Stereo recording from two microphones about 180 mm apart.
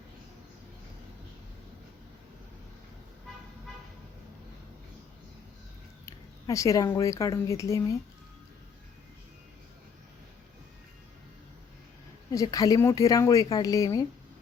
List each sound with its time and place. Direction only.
6.1 s speech: 15° left (ahead or behind)
12.3 s speech: 20° left (ahead or behind)